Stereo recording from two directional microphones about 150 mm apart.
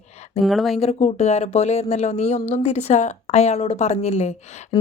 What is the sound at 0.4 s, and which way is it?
Speech, centre (ahead or behind).